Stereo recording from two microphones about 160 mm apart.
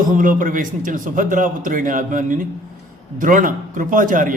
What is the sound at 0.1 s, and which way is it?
A man's voice, 55° right (ahead or behind).